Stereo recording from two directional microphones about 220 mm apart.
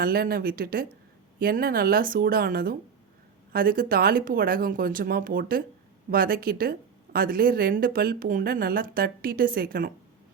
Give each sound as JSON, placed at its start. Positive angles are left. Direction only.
{"t": 0.0, "sound": "a woman's voice", "side_deg": -45}